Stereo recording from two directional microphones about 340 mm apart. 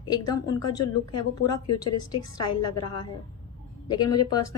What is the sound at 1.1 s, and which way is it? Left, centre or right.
A woman's voice, left.